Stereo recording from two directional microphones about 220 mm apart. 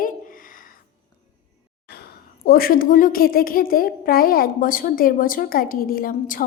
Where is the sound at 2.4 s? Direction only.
40° left (ahead or behind).